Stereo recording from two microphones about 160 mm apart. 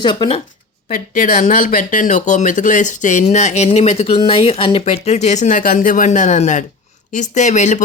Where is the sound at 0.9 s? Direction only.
55° left (ahead or behind).